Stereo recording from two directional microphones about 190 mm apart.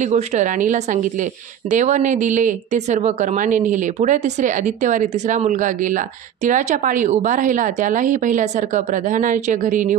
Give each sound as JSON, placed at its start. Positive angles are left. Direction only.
{"t": 0.0, "sound": "a woman's voice", "side_deg": -40}